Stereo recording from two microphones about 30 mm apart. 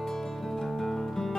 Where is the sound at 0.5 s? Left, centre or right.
Centre.